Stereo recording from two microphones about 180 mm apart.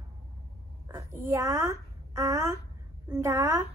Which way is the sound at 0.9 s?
15° right (ahead or behind).